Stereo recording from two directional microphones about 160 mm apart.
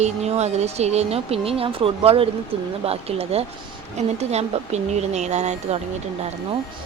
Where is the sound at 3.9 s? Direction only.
45° right (ahead or behind).